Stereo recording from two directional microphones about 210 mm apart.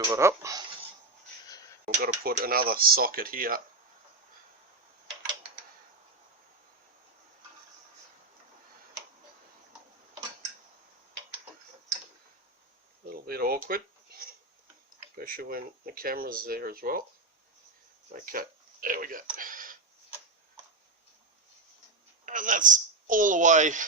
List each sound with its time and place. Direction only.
0.0 s speech: 15° right (ahead or behind)
1.5 s a sound: 15° left (ahead or behind)
2.0 s speech: 45° right (ahead or behind)
13.1 s a sound: 45° right (ahead or behind)
15.1 s speech: 45° right (ahead or behind)
18.1 s speech: 45° right (ahead or behind)
22.3 s a woman's voice: 40° right (ahead or behind)